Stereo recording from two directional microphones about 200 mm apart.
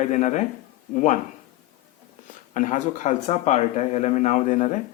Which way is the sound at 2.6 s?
40° left (ahead or behind).